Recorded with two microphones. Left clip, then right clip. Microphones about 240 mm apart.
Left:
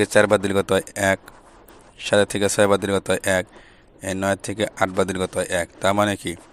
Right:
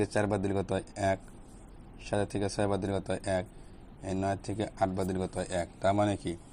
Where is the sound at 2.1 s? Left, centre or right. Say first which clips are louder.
Left 14 dB; left.